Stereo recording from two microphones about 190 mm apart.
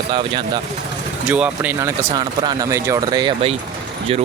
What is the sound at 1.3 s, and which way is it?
Speech, 5° right (ahead or behind).